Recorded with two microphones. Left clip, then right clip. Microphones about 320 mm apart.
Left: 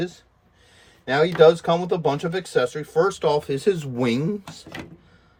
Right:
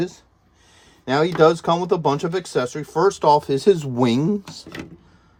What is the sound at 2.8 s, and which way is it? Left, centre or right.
Speech, centre.